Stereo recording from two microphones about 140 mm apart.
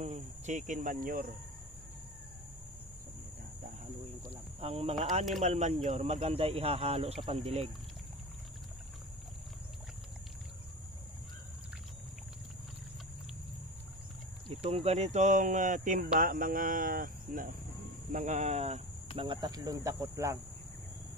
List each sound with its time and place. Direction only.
0.0 s speech: 55° right (ahead or behind); by 1.3 s 85° right
4.6 s speech: 45° right (ahead or behind)
14.5 s speech: 50° right (ahead or behind); by 16.1 s 70° right (ahead or behind)
16.2 s speech: 85° right
18.1 s speech: 60° right (ahead or behind)
19.1 s speech: 40° right (ahead or behind)